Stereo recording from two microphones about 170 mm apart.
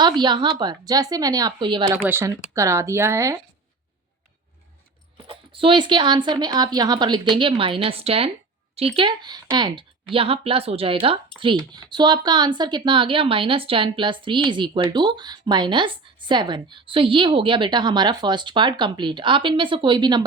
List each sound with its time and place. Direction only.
0.0 s speech: 25° right (ahead or behind)
2.0 s speech: 15° right (ahead or behind)
5.1 s speech: 30° right (ahead or behind)